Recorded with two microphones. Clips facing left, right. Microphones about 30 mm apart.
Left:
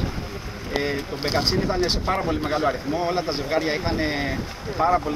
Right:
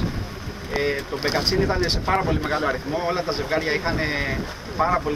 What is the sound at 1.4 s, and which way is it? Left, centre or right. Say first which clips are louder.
Speech: right 1 dB; right.